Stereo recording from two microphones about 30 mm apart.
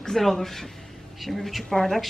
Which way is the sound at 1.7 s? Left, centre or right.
Centre.